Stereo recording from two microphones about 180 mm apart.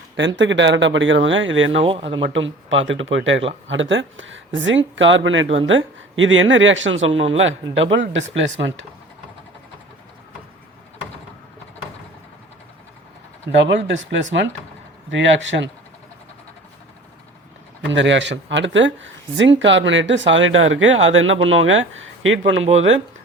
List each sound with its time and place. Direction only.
0.2 s speech: 90° right
1.8 s speech: 30° right (ahead or behind)
2.2 s speech: 90° right
13.6 s speech: 75° right (ahead or behind)
17.8 s speech: 90° right